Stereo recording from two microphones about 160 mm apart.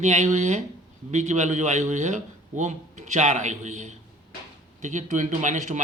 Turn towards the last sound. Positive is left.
turn(degrees=-50)  # may be behind; listen again after turning